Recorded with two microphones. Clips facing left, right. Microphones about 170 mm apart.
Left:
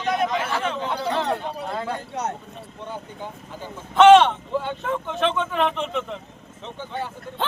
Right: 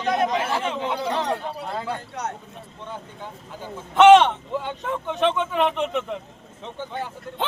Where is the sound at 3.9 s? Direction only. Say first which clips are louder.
Even; 15° right (ahead or behind).